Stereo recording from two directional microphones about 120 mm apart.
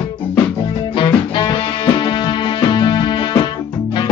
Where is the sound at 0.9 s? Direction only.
40° left (ahead or behind).